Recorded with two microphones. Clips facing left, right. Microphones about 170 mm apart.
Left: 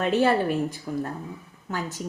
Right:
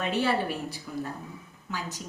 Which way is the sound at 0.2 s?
50° left (ahead or behind).